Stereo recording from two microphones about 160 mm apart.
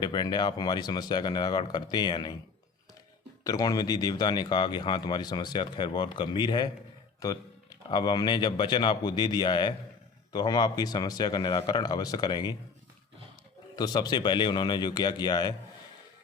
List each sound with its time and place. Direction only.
0.0 s speech: 25° left (ahead or behind)
3.4 s speech: 20° left (ahead or behind)
13.7 s speech: 25° left (ahead or behind)